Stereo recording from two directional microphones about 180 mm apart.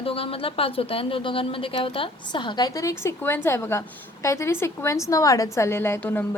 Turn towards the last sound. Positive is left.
turn(degrees=10)  # may be behind; listen again after turning